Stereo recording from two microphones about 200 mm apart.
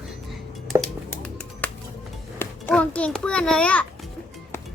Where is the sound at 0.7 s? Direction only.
5° left (ahead or behind).